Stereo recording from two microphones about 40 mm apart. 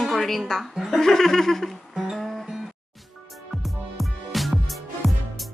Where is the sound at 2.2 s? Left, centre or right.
Centre.